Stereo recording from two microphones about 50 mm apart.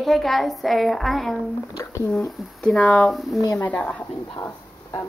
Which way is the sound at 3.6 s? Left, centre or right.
Left.